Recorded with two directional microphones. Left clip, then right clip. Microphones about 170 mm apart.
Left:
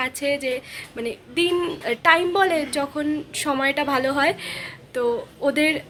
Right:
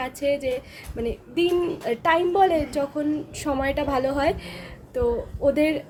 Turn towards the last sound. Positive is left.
turn(degrees=-10)  # may be behind; listen again after turning